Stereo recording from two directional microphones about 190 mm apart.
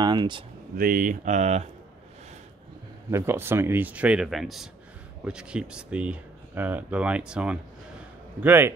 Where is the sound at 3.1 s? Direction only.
10° right (ahead or behind).